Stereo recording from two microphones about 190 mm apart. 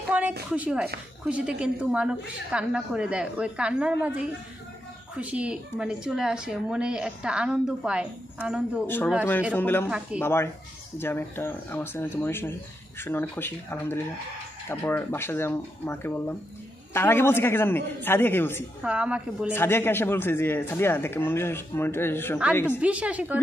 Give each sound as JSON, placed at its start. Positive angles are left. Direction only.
{"t": 0.1, "sound": "a sound", "side_deg": -10}
{"t": 0.5, "sound": "speech", "side_deg": -5}
{"t": 8.8, "sound": "a man's voice", "side_deg": 10}
{"t": 9.8, "sound": "speech", "side_deg": -5}
{"t": 10.2, "sound": "a man's voice", "side_deg": 10}
{"t": 18.8, "sound": "speech", "side_deg": -5}
{"t": 19.5, "sound": "a man's voice", "side_deg": 10}
{"t": 22.8, "sound": "a woman's voice", "side_deg": -5}